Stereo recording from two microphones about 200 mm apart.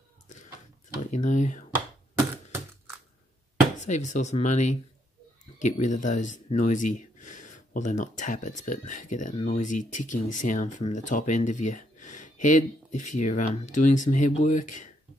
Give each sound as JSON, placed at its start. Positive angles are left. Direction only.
{"t": 0.9, "sound": "speech", "side_deg": 40}
{"t": 3.8, "sound": "speech", "side_deg": 35}